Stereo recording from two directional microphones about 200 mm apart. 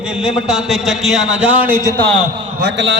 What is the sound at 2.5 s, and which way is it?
Speech, 60° right (ahead or behind).